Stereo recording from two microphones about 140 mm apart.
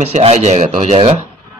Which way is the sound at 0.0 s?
50° right (ahead or behind).